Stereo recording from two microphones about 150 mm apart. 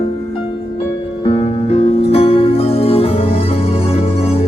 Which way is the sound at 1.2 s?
45° left (ahead or behind).